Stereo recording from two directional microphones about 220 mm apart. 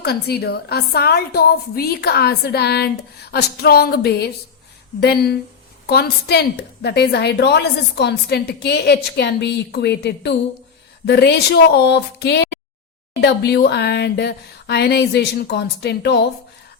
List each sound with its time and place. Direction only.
0.0 s a woman's voice: 45° left (ahead or behind)